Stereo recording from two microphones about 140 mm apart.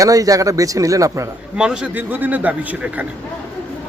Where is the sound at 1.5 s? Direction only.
5° right (ahead or behind).